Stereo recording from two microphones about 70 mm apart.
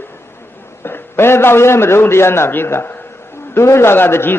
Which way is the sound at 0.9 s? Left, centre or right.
Left.